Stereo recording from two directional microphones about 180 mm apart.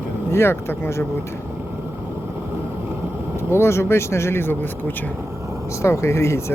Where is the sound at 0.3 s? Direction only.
15° left (ahead or behind).